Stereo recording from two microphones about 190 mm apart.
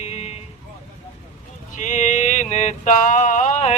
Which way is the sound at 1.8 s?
40° left (ahead or behind).